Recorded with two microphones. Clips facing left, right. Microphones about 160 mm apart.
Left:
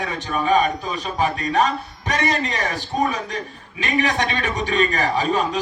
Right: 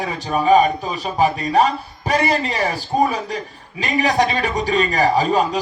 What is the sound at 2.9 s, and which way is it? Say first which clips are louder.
A man's voice: right 4 dB; 35° right (ahead or behind).